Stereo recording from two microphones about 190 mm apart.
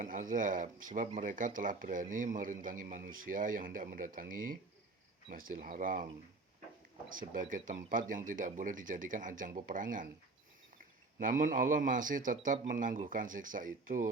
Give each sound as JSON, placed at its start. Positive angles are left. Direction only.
{"t": 0.0, "sound": "speech", "side_deg": -45}
{"t": 7.1, "sound": "speech", "side_deg": -45}
{"t": 11.2, "sound": "speech", "side_deg": -45}